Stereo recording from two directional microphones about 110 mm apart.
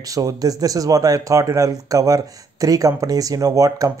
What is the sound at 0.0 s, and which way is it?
Speech, 30° right (ahead or behind).